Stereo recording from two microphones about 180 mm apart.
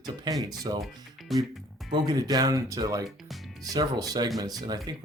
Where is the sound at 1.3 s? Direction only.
Centre (ahead or behind).